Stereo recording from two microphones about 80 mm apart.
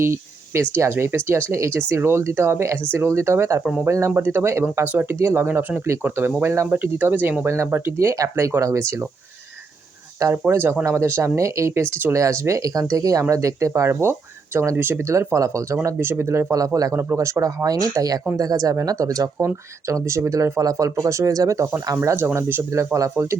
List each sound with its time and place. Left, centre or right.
0.0 s speech: right
3.6 s speech: centre
3.8 s speech: right
7.4 s speech: right
10.5 s speech: right
16.0 s speech: right
16.9 s speech: right
17.7 s speech: right
22.0 s speech: right